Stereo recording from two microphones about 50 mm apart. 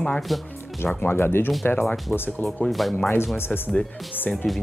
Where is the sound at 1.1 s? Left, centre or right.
Left.